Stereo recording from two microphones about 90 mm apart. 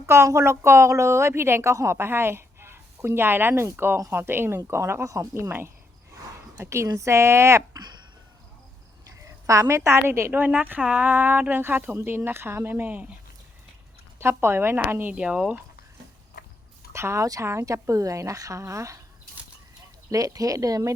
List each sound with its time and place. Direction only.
0.0 s a woman's voice: 30° right (ahead or behind)
9.0 s a woman's voice: 35° right (ahead or behind); by 13.1 s 20° right (ahead or behind)
14.2 s a woman's voice: 25° right (ahead or behind)
15.1 s speech: 10° right (ahead or behind)
16.9 s a woman's voice: 30° right (ahead or behind)
20.1 s a woman's voice: 40° right (ahead or behind)